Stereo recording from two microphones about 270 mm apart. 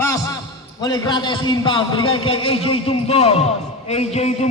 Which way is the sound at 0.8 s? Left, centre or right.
Centre.